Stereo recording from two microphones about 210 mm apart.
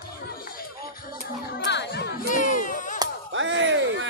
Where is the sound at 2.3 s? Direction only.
40° left (ahead or behind).